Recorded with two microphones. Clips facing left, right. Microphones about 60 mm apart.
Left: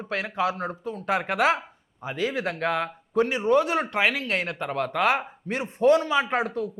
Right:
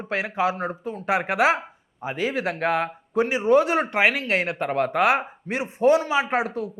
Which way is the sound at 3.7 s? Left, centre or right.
Right.